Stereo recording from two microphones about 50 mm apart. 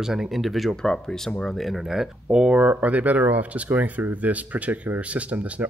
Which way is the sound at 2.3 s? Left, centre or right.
Centre.